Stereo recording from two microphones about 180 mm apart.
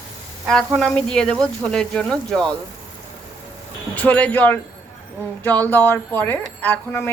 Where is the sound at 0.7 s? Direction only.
Centre (ahead or behind).